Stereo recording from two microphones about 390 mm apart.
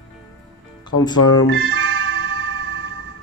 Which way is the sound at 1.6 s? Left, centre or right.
Right.